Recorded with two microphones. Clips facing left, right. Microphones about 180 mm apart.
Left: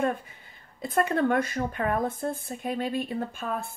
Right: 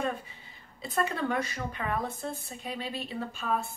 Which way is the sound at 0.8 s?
50° left (ahead or behind).